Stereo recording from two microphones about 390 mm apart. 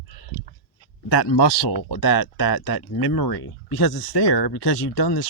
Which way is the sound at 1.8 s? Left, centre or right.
Left.